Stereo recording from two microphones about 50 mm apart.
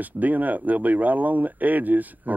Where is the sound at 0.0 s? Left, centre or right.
Right.